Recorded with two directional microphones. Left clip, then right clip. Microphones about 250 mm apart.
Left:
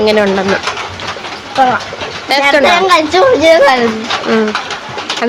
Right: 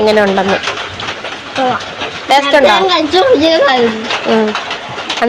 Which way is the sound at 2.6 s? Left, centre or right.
Centre.